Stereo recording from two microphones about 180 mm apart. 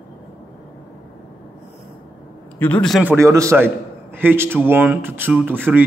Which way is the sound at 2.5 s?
10° left (ahead or behind).